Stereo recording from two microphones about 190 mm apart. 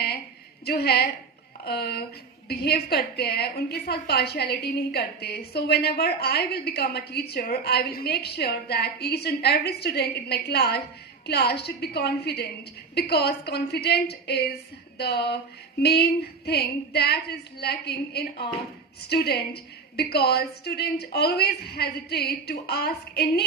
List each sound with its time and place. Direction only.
0.6 s a woman's voice: 55° left (ahead or behind)